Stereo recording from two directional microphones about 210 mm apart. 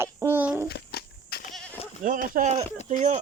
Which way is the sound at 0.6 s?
50° left (ahead or behind).